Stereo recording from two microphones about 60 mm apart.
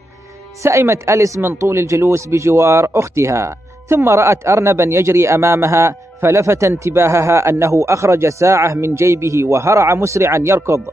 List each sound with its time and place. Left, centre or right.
0.6 s speech: right